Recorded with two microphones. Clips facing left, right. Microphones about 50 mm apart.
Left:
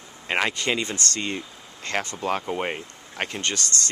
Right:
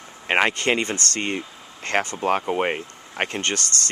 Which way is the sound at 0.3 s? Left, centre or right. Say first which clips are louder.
Right 4 dB; right.